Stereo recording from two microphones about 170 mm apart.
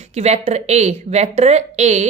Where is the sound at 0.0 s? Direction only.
40° right (ahead or behind).